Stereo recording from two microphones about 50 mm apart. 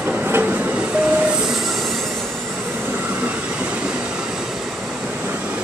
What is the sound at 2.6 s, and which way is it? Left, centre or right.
Train, right.